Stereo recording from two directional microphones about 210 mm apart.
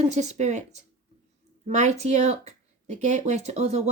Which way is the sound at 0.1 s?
35° right (ahead or behind).